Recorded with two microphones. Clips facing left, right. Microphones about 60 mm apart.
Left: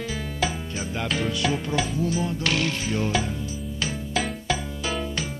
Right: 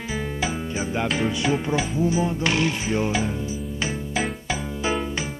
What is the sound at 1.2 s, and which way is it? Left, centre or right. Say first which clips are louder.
Music: right 2 dB; centre.